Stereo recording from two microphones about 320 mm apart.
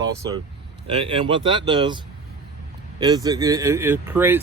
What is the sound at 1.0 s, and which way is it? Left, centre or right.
Speech, centre.